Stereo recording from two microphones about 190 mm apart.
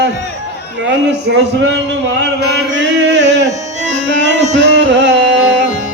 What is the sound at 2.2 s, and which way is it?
Chant, 65° right (ahead or behind).